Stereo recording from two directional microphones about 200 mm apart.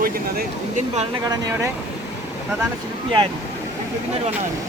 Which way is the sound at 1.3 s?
15° right (ahead or behind).